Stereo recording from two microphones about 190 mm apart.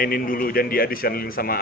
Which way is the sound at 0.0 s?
50° left (ahead or behind).